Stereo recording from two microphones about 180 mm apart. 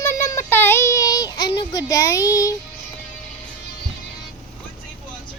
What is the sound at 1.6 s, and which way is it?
Speech, 20° left (ahead or behind).